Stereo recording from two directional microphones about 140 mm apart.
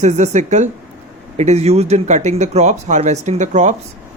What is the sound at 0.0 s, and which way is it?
Speech, 55° right (ahead or behind).